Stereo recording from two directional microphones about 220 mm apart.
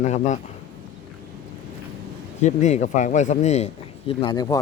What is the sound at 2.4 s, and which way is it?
Speech, 30° left (ahead or behind).